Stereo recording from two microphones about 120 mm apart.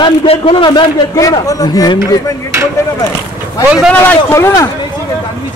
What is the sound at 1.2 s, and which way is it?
Speech, 30° left (ahead or behind).